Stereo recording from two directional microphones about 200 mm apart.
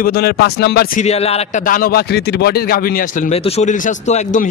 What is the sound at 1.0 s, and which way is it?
A man's voice, 30° left (ahead or behind).